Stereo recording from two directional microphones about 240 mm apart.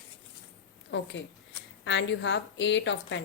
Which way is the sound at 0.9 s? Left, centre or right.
Left.